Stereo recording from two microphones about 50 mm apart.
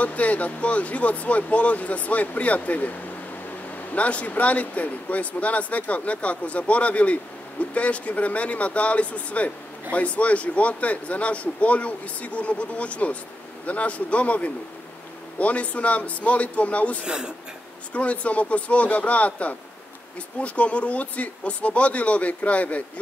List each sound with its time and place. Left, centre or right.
0.0 s speech: left
17.0 s speech: centre
17.9 s speech: left